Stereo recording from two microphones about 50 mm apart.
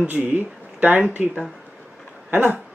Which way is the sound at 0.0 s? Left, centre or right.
Right.